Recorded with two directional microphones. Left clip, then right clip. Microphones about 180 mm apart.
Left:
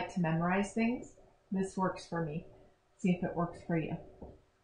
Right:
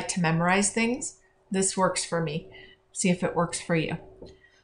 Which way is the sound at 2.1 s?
30° right (ahead or behind).